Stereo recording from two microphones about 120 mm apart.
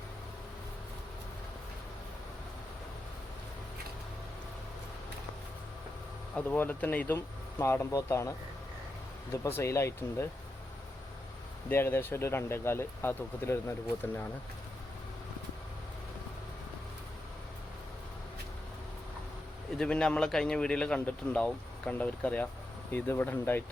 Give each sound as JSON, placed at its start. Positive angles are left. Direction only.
{"t": 6.3, "sound": "a man's voice", "side_deg": 15}
{"t": 9.3, "sound": "speech", "side_deg": 20}
{"t": 11.7, "sound": "speech", "side_deg": 20}
{"t": 19.8, "sound": "a man's voice", "side_deg": 5}